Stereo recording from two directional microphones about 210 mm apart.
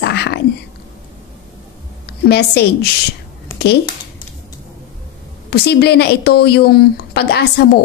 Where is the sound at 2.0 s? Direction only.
50° left (ahead or behind).